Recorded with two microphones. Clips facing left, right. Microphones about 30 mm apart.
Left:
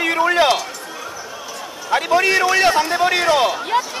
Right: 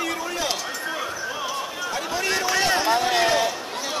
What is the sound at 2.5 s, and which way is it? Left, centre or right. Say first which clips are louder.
Speech: left 5 dB; left.